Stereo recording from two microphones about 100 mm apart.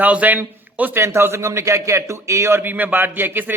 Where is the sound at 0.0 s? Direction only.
15° right (ahead or behind).